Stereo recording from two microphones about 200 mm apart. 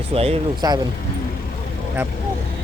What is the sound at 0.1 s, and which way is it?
Speech, 30° right (ahead or behind).